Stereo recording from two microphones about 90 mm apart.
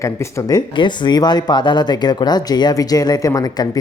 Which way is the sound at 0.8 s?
55° left (ahead or behind).